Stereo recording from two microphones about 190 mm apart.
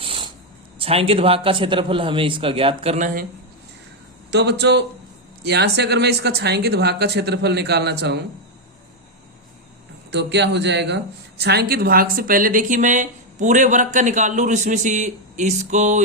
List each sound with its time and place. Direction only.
0.0 s a sound: 30° right (ahead or behind)
0.8 s a man's voice: 30° right (ahead or behind)
4.3 s speech: 60° right (ahead or behind)
10.1 s speech: 65° right (ahead or behind); by 16.0 s 40° right (ahead or behind)